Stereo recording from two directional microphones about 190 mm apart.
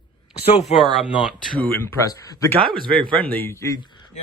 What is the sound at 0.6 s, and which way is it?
Speech, centre (ahead or behind).